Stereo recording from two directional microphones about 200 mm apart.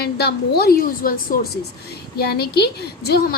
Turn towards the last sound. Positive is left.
turn(degrees=50)  # may be behind; listen again after turning